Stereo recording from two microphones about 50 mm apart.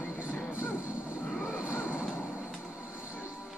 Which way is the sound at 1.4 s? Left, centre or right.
Right.